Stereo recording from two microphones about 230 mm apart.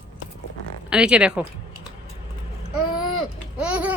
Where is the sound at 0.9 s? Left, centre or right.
Centre.